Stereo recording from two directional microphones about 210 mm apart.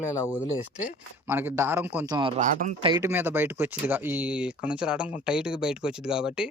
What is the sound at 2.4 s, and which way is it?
Speech, 35° right (ahead or behind).